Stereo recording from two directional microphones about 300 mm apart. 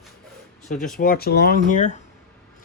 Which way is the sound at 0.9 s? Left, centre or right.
Left.